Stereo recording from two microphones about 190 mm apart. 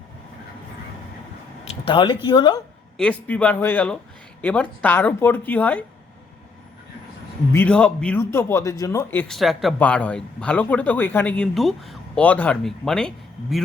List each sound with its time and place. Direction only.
1.8 s speech: 25° left (ahead or behind)
3.0 s a man's voice: 5° left (ahead or behind)
7.5 s a man's voice: 10° left (ahead or behind)